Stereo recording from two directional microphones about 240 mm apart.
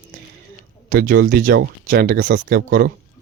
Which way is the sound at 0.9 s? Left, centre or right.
Right.